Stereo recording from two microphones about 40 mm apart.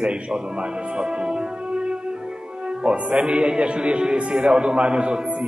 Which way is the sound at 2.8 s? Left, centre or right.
Right.